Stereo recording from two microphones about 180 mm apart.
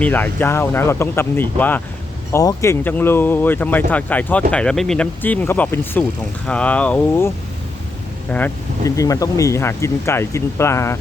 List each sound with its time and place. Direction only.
0.0 s speech: 10° left (ahead or behind)
8.3 s speech: 10° left (ahead or behind)
8.8 s speech: 20° left (ahead or behind)